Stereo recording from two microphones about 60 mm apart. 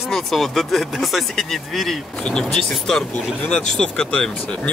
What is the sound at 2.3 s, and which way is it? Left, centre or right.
Speech, centre.